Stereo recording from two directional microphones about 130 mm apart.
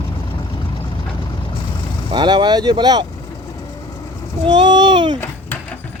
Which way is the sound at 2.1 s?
35° right (ahead or behind).